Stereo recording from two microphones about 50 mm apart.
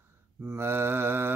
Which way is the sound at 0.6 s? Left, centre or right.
Right.